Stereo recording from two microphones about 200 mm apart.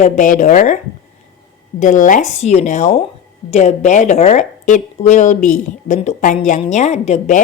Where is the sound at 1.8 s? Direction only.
40° left (ahead or behind).